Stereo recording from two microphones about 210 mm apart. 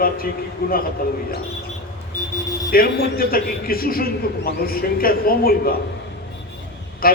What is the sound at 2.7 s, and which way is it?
A man's voice, 45° left (ahead or behind).